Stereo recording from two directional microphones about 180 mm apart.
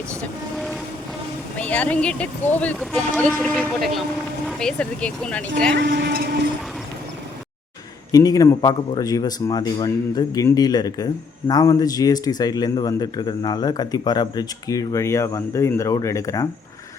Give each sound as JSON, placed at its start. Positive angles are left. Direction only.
{"t": 0.2, "sound": "boat", "side_deg": 0}
{"t": 1.5, "sound": "speech", "side_deg": 10}
{"t": 5.7, "sound": "speech", "side_deg": -70}
{"t": 8.1, "sound": "speech", "side_deg": 20}